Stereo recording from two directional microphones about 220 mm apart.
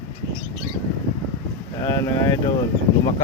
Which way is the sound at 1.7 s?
15° left (ahead or behind).